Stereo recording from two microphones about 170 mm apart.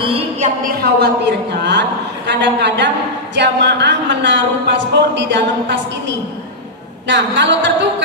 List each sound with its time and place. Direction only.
0.0 s a woman's voice: 30° right (ahead or behind)
0.7 s a woman's voice: 75° right (ahead or behind)